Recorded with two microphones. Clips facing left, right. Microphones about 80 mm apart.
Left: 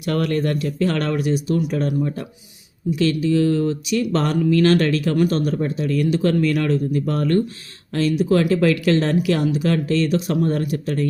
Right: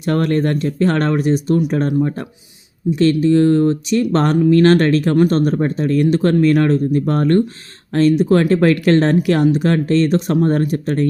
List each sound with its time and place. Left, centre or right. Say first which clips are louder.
0.0 s speech: right 4 dB; right